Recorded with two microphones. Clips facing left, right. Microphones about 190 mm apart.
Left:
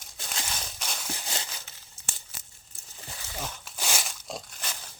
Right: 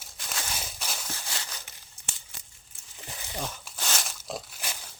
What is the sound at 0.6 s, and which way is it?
Walk, 5° right (ahead or behind).